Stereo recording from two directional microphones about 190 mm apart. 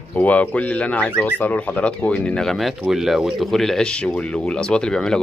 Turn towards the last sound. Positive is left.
turn(degrees=5)  # may be behind; listen again after turning